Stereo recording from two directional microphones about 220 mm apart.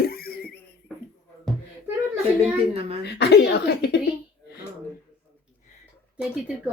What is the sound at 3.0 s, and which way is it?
Speech, 50° left (ahead or behind).